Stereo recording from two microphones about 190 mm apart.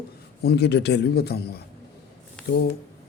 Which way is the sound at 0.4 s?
60° left (ahead or behind).